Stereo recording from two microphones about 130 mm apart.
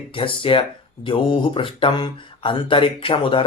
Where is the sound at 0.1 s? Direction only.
45° left (ahead or behind).